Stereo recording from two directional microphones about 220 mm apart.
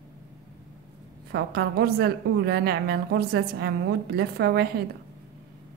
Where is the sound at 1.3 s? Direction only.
45° right (ahead or behind).